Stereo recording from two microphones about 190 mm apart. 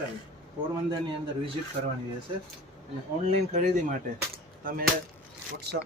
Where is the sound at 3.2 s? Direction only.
35° right (ahead or behind).